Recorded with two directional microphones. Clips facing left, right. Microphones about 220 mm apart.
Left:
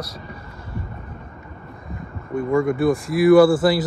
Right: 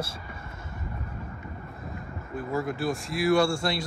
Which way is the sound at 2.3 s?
Centre (ahead or behind).